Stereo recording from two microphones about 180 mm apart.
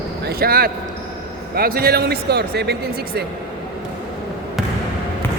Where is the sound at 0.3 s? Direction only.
55° right (ahead or behind).